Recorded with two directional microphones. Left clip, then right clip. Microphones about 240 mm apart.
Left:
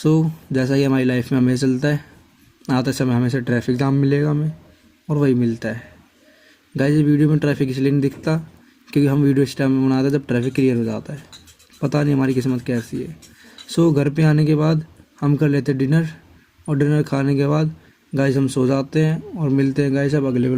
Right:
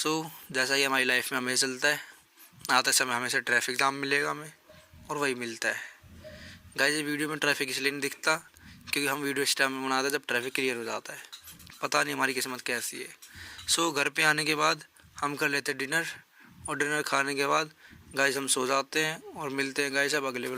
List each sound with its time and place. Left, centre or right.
0.0 s speech: right